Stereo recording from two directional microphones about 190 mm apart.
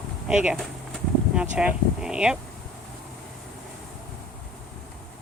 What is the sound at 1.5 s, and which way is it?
Speech, 5° right (ahead or behind).